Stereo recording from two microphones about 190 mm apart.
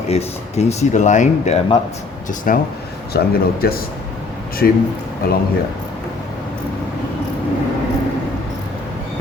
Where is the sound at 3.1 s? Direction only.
55° left (ahead or behind).